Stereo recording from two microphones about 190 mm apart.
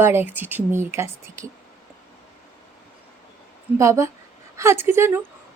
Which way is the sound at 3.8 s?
15° right (ahead or behind).